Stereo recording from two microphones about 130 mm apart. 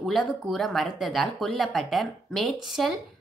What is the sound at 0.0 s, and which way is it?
Speech, centre (ahead or behind).